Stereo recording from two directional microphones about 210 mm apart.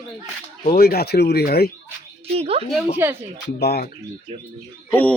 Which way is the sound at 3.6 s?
50° left (ahead or behind).